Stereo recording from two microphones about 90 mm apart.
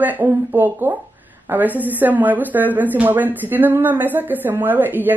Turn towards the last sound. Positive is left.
turn(degrees=-20)  # may be behind; listen again after turning